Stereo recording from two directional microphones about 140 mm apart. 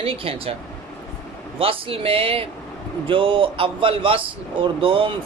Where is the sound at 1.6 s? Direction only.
40° right (ahead or behind).